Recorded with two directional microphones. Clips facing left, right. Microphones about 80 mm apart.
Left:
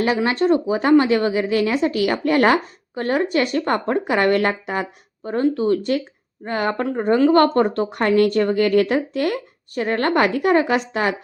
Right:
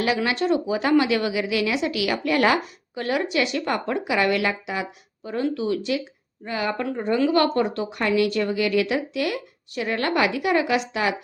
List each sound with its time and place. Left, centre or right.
0.0 s a woman's voice: left